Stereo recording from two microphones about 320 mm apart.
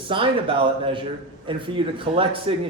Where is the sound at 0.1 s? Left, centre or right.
Centre.